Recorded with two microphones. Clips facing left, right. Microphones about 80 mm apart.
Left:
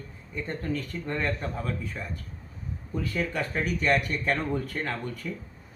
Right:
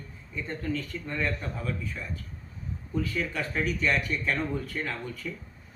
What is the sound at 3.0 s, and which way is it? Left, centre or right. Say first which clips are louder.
Speech: left 3 dB; left.